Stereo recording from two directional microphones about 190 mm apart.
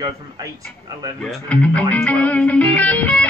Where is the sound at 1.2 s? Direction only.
5° left (ahead or behind).